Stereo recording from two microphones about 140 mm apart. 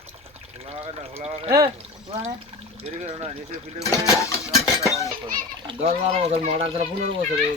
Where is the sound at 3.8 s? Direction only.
25° left (ahead or behind).